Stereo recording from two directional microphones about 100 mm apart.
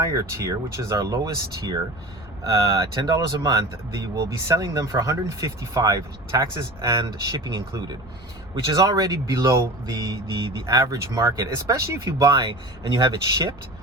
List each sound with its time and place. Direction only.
0.0 s speech: 35° right (ahead or behind)
6.9 s speech: 45° right (ahead or behind)
8.7 s speech: 40° right (ahead or behind)
12.4 s speech: 50° right (ahead or behind)